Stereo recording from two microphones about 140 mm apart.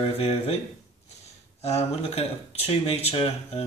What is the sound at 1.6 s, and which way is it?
Speech, 50° left (ahead or behind).